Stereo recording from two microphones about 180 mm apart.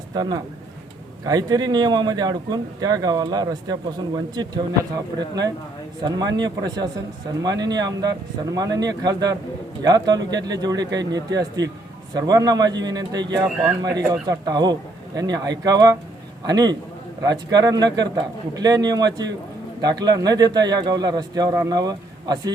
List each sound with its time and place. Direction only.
0.1 s speech: 20° right (ahead or behind)
6.0 s speech: 25° right (ahead or behind)